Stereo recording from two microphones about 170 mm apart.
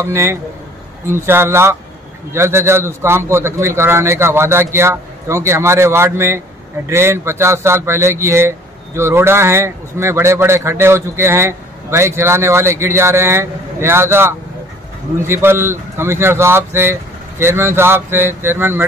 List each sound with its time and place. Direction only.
0.0 s speech: 15° right (ahead or behind)